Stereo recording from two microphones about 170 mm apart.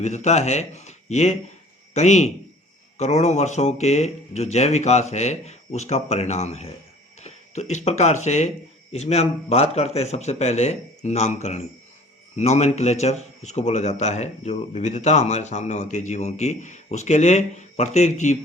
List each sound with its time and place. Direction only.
0.0 s a man's voice: 45° left (ahead or behind)